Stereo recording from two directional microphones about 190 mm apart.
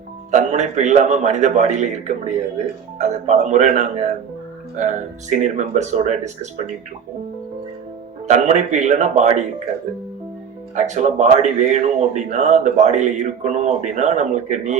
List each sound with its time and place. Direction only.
0.3 s a man's voice: 35° right (ahead or behind)
8.3 s a man's voice: 40° right (ahead or behind)
10.8 s a man's voice: 40° right (ahead or behind)